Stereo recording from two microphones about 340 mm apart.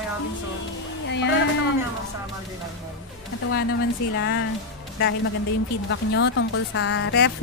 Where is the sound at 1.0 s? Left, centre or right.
Left.